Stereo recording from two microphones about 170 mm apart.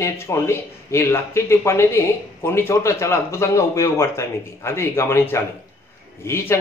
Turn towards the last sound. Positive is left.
turn(degrees=15)  # may be behind; listen again after turning